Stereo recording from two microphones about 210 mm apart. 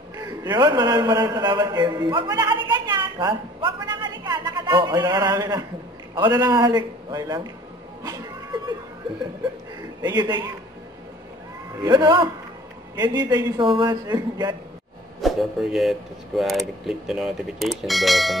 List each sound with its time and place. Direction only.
0.2 s a man's voice: 20° right (ahead or behind)
8.0 s cat: 20° right (ahead or behind)
10.0 s a man's voice: 20° right (ahead or behind)
11.8 s a man's voice: 20° right (ahead or behind)
15.1 s speech: centre (ahead or behind)